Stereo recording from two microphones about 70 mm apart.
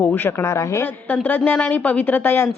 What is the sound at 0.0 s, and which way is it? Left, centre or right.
Speech, left.